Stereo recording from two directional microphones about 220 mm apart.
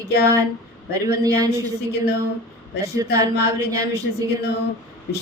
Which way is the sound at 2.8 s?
15° right (ahead or behind).